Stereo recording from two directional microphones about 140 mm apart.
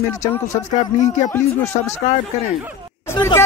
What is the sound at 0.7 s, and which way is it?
Speech, 60° left (ahead or behind).